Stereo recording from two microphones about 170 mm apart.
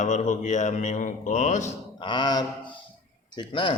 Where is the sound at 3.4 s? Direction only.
30° left (ahead or behind).